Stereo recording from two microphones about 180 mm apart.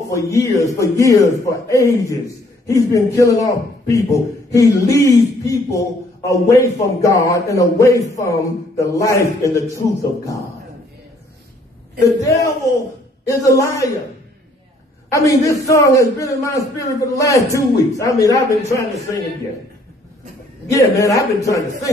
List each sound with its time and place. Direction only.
0.1 s a man's voice: 15° left (ahead or behind)
13.3 s a man's voice: 20° left (ahead or behind)
15.0 s a man's voice: 15° left (ahead or behind)
20.7 s a man's voice: 20° left (ahead or behind)